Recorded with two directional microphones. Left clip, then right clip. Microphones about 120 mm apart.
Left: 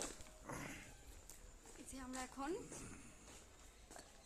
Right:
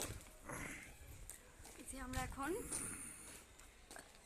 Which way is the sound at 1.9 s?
20° right (ahead or behind).